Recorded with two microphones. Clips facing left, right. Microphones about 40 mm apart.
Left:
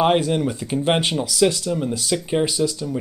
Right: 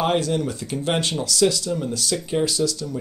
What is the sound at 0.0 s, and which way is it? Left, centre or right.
Speech, left.